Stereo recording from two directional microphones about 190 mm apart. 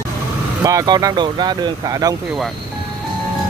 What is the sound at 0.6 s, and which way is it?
Speech, 20° right (ahead or behind).